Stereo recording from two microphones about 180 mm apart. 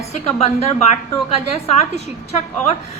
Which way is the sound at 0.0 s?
35° left (ahead or behind).